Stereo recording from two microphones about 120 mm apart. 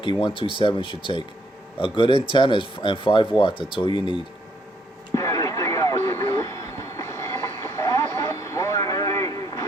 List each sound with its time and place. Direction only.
0.0 s speech: 45° left (ahead or behind)
5.1 s vehicle: 25° left (ahead or behind)